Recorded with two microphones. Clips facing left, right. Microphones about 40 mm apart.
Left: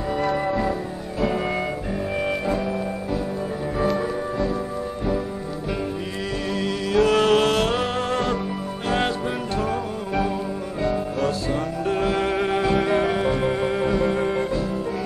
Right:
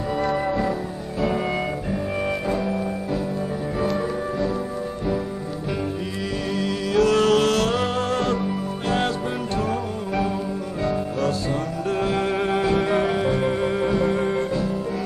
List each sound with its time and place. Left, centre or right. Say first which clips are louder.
7.0 s music: even; left; by 8.4 s centre
10.8 s music: left 1 dB; centre
13.1 s music: even; centre